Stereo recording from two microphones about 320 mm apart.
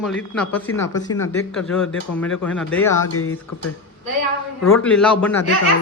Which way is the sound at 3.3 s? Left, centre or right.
Left.